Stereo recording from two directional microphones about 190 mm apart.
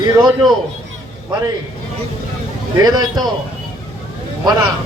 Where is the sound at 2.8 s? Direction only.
20° right (ahead or behind).